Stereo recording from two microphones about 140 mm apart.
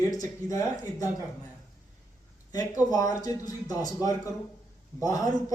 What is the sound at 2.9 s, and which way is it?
Speech, 25° left (ahead or behind).